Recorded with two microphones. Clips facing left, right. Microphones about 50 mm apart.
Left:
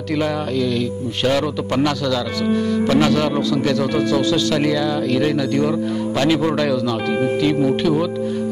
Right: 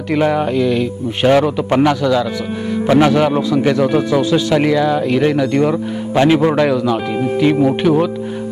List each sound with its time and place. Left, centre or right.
0.1 s speech: right